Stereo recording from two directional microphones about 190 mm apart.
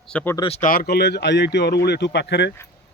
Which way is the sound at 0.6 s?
50° left (ahead or behind).